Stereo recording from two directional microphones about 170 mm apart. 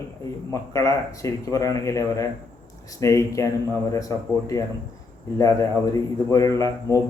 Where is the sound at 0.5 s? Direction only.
20° left (ahead or behind).